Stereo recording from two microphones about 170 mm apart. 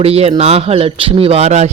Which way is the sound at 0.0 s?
35° right (ahead or behind).